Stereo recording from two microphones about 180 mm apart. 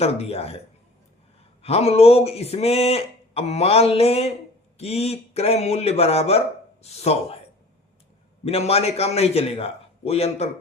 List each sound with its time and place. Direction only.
0.0 s speech: 35° left (ahead or behind)
1.6 s speech: 35° left (ahead or behind)
8.4 s speech: 35° left (ahead or behind)